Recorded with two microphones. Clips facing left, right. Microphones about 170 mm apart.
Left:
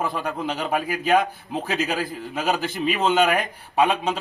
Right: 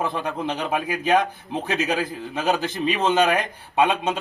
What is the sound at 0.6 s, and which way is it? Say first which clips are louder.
Speech: even; 5° left (ahead or behind).